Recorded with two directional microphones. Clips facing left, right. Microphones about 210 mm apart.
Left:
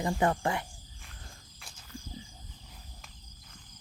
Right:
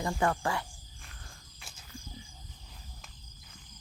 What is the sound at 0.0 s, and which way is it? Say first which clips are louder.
Speech: left 2 dB; 20° left (ahead or behind).